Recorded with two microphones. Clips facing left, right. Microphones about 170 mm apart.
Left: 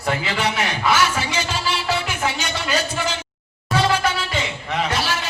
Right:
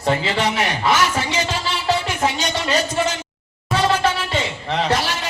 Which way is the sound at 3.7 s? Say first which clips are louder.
Right 1 dB; 30° right (ahead or behind).